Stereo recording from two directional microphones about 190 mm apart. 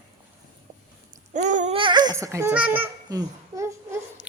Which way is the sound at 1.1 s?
40° right (ahead or behind).